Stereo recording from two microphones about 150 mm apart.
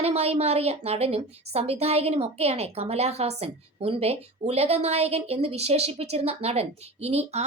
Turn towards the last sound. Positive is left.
turn(degrees=-45)  # may be behind; listen again after turning